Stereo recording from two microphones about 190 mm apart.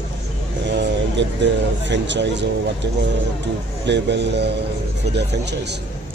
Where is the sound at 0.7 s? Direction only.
65° right (ahead or behind).